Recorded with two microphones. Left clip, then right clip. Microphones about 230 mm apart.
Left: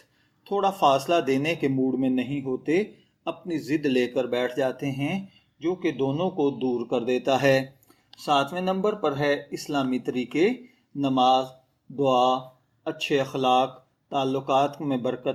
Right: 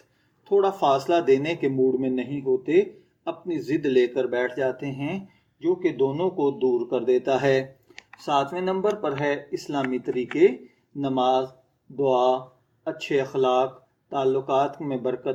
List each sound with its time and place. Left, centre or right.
0.4 s speech: left